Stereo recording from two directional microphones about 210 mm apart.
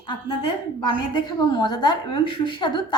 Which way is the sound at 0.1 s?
20° left (ahead or behind).